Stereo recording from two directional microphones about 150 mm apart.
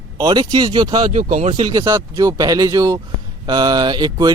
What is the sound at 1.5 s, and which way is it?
Speech, 30° right (ahead or behind).